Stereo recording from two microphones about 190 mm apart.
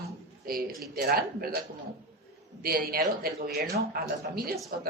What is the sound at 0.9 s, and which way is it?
Speech, 55° right (ahead or behind).